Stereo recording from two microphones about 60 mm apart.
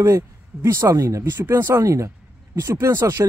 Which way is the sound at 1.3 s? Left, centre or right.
Right.